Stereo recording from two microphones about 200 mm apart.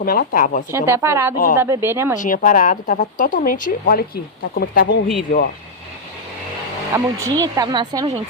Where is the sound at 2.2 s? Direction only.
40° left (ahead or behind).